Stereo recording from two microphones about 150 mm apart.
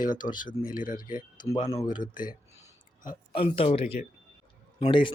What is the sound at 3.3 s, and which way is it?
Speech, 40° left (ahead or behind).